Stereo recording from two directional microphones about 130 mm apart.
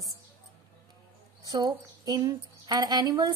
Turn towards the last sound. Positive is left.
turn(degrees=-30)  # may be behind; listen again after turning